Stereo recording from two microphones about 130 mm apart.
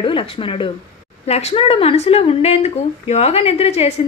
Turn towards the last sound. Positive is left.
turn(degrees=55)  # may be behind; listen again after turning